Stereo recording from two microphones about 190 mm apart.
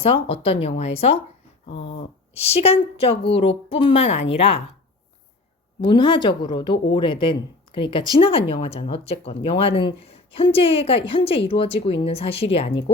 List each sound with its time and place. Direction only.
0.0 s speech: 30° left (ahead or behind)
5.8 s speech: 25° left (ahead or behind)